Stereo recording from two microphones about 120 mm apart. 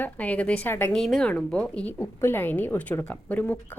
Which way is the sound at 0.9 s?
5° left (ahead or behind).